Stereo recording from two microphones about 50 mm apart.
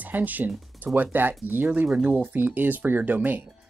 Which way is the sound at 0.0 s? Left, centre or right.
Right.